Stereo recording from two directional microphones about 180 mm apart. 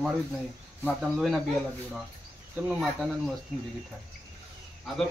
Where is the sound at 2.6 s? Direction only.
5° right (ahead or behind).